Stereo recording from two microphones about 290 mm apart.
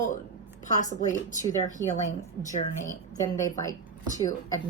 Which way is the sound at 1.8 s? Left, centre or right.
Centre.